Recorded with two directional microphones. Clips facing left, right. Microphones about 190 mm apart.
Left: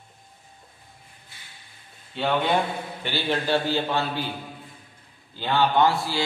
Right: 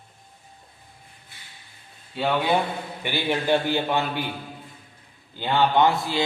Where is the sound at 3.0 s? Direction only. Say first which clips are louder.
Right 1 dB; 15° right (ahead or behind).